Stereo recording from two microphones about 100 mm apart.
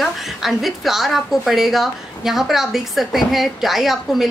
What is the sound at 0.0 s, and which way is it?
A woman's voice, centre (ahead or behind).